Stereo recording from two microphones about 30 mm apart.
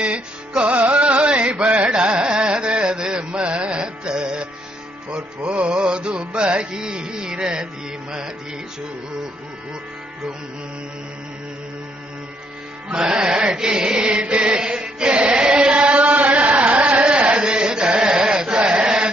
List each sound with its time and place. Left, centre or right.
0.0 s music: right
1.9 s carnatic music: right
5.4 s music: right
12.9 s chant: right
17.3 s chant: right
18.6 s chant: right
18.9 s chant: right